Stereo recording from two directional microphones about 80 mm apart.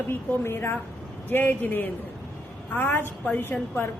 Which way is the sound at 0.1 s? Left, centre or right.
Left.